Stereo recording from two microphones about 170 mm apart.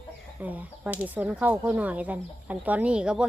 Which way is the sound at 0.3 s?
10° right (ahead or behind).